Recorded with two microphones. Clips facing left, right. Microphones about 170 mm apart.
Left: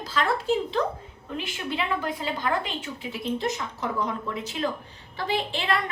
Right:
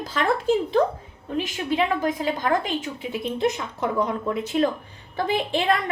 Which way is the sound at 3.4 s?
60° right (ahead or behind).